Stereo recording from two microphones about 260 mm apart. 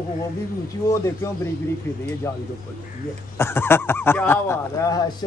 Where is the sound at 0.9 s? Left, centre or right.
Centre.